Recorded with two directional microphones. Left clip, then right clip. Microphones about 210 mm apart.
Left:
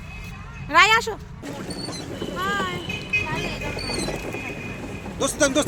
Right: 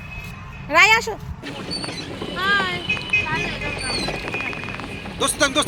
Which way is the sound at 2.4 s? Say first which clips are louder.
Right 6 dB; 25° left (ahead or behind).